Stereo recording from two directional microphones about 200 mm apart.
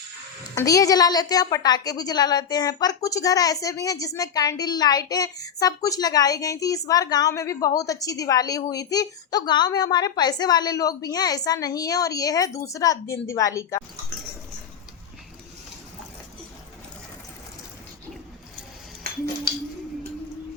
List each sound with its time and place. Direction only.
0.5 s a woman's voice: 15° left (ahead or behind)